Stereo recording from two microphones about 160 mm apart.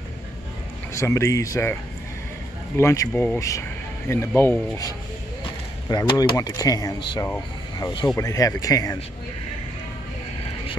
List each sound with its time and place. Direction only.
0.9 s speech: 20° left (ahead or behind)
2.8 s speech: 15° left (ahead or behind)